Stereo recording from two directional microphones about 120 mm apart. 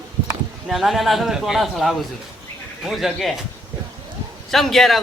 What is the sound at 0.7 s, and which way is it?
Speech, centre (ahead or behind).